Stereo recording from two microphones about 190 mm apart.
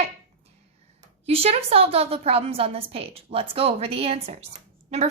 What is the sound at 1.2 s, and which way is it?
A woman's voice, 30° right (ahead or behind).